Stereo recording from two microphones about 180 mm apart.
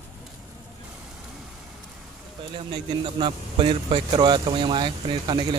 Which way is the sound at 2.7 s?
25° right (ahead or behind).